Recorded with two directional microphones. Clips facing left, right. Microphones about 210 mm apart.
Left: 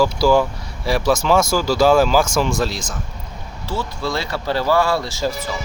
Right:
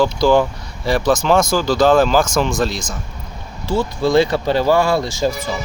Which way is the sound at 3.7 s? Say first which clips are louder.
Right 7 dB; 15° right (ahead or behind).